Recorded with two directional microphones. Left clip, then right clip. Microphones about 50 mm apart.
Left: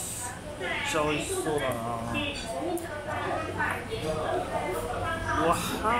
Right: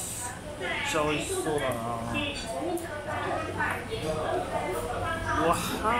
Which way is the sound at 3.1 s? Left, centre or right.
Centre.